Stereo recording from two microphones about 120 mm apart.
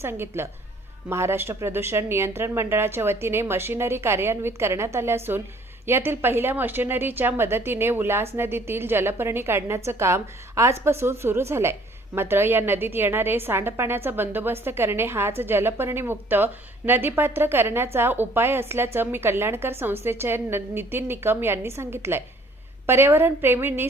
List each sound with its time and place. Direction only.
0.0 s a woman's voice: 20° right (ahead or behind)